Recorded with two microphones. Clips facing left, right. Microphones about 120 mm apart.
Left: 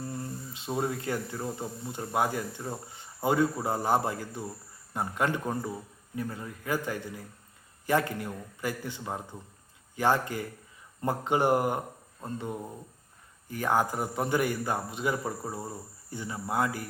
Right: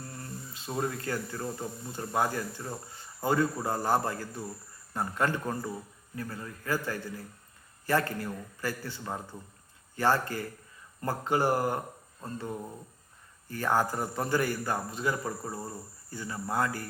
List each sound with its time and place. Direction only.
0.0 s a man's voice: 15° left (ahead or behind)